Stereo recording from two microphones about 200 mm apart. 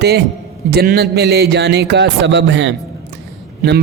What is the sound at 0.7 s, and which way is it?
A man's voice, 55° right (ahead or behind).